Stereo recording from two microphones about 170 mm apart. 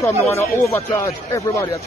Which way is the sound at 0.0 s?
15° left (ahead or behind).